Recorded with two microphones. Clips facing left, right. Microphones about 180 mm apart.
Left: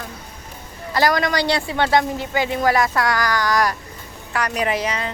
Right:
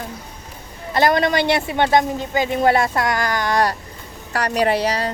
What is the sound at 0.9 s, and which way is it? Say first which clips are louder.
A woman's voice: right 2 dB; 25° right (ahead or behind).